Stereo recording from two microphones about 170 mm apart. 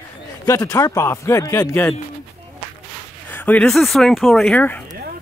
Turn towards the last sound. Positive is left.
turn(degrees=10)  # may be behind; listen again after turning